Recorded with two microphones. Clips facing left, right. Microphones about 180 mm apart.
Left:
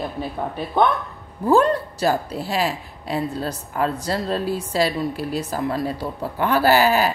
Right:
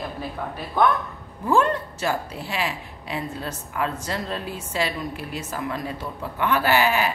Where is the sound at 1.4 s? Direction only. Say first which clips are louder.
Left 4 dB; 35° left (ahead or behind).